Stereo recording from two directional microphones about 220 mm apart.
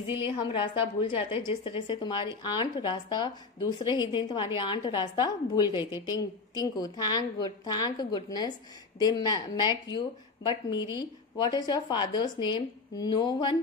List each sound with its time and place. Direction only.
0.0 s a woman's voice: 20° left (ahead or behind)